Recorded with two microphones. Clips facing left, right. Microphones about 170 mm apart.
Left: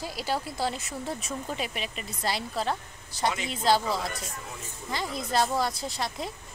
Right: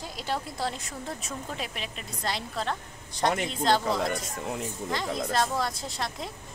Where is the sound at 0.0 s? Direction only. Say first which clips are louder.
Left 2 dB; 5° left (ahead or behind).